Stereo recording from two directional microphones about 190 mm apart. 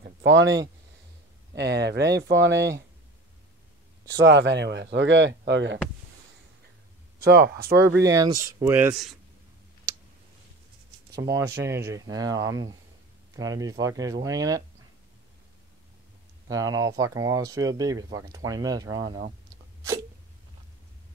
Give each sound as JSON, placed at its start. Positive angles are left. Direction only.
{"t": 0.0, "sound": "a sound", "side_deg": -70}
{"t": 1.5, "sound": "speech", "side_deg": -60}
{"t": 4.1, "sound": "speech", "side_deg": -70}
{"t": 7.2, "sound": "speech", "side_deg": -55}
{"t": 8.0, "sound": "speech", "side_deg": -20}
{"t": 11.1, "sound": "speech", "side_deg": -20}
{"t": 16.4, "sound": "speech", "side_deg": -20}